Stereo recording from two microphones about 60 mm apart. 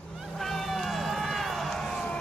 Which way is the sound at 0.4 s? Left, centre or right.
Centre.